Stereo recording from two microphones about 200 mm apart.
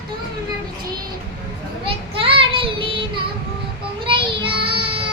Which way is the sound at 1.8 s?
25° right (ahead or behind).